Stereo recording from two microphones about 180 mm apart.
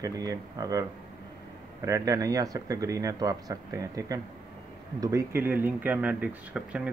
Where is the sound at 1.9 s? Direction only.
20° right (ahead or behind).